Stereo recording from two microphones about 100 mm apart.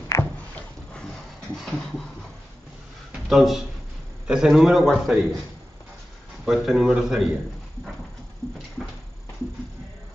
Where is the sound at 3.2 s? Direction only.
Centre (ahead or behind).